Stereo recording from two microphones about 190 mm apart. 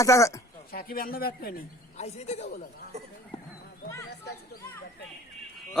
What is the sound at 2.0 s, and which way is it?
Speech, 35° left (ahead or behind).